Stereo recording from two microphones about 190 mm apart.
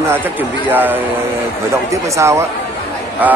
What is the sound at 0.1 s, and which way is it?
Speech, 10° right (ahead or behind).